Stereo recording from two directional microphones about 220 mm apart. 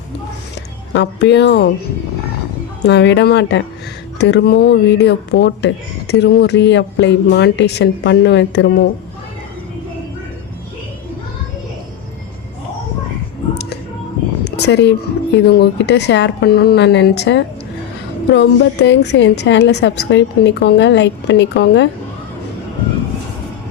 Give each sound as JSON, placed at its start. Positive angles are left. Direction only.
{"t": 0.9, "sound": "speech", "side_deg": 50}
{"t": 2.8, "sound": "speech", "side_deg": 50}
{"t": 14.4, "sound": "a sound", "side_deg": 50}
{"t": 15.4, "sound": "speech", "side_deg": 50}